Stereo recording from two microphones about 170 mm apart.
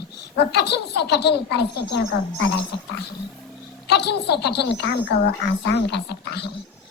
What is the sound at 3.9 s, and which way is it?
A woman's voice, 80° left.